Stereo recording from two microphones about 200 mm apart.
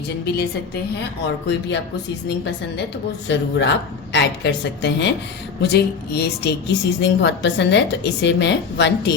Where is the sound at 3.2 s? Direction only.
60° left (ahead or behind).